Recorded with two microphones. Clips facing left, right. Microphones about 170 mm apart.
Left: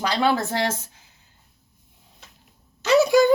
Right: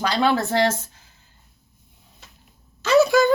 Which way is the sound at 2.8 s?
15° left (ahead or behind).